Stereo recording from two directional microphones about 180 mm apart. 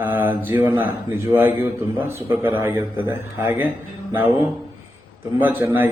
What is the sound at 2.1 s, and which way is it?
A man's voice, 15° right (ahead or behind).